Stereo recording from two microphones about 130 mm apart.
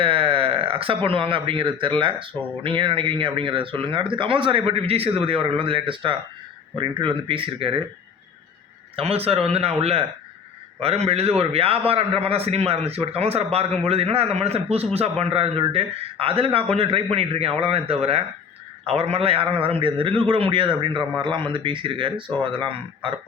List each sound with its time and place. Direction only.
0.0 s a sound: 45° right (ahead or behind)
1.0 s speech: 45° right (ahead or behind)
9.0 s a man's voice: 50° right (ahead or behind)